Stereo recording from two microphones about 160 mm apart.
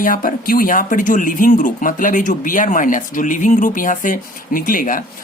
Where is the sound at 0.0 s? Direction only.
60° left (ahead or behind).